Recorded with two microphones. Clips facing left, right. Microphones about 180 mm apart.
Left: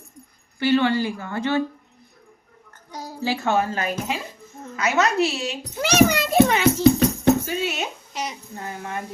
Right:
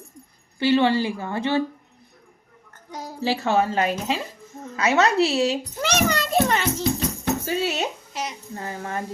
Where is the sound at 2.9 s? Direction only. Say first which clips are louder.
Right 1 dB; 25° right (ahead or behind).